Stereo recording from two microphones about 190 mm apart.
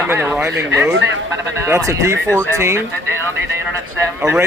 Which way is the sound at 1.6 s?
15° right (ahead or behind).